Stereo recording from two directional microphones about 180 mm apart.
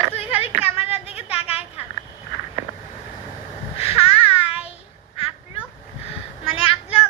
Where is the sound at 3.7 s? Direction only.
35° left (ahead or behind).